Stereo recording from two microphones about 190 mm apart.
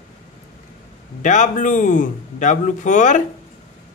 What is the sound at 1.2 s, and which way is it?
A man's voice, 40° left (ahead or behind).